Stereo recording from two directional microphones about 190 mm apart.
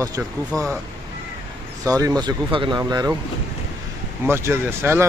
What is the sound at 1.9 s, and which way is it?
Speech, 20° right (ahead or behind).